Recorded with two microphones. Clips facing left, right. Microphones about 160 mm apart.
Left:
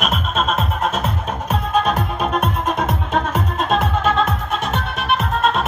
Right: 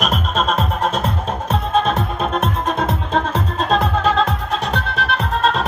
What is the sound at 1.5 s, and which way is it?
Music, 25° right (ahead or behind).